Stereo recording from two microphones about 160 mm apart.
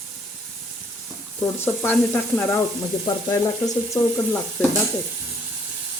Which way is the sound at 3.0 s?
25° left (ahead or behind).